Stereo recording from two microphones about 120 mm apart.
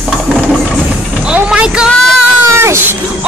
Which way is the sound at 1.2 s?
10° right (ahead or behind).